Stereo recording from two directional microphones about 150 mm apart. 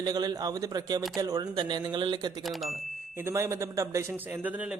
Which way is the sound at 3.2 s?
20° right (ahead or behind).